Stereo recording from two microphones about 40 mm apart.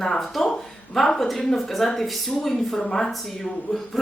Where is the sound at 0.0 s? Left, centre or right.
Centre.